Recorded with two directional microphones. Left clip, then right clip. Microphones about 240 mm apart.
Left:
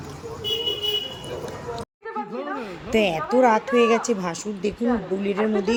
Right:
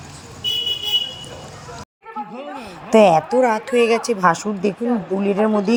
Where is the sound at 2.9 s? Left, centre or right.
Centre.